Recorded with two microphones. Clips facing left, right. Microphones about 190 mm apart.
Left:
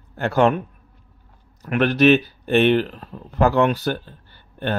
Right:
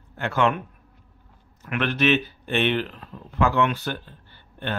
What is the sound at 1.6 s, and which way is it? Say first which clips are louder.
Speech: left 7 dB; 40° left (ahead or behind).